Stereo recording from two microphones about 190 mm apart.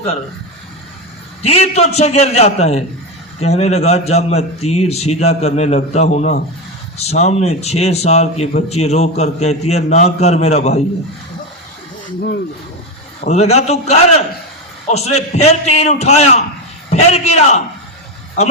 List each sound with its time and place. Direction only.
1.4 s a man's voice: 35° left (ahead or behind)
13.2 s a man's voice: 35° left (ahead or behind)